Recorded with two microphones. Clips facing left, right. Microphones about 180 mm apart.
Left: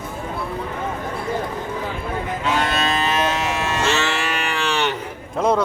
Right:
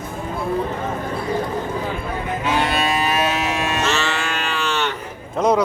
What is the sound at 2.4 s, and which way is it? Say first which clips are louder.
Cattle: right 1 dB; 15° right (ahead or behind).